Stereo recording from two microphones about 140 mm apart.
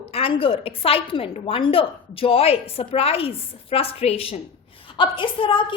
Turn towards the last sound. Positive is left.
turn(degrees=35)  # may be behind; listen again after turning